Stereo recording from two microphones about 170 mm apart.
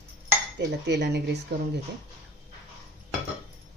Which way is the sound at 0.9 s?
75° right (ahead or behind).